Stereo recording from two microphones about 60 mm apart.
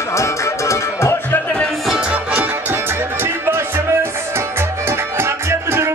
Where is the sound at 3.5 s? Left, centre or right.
Right.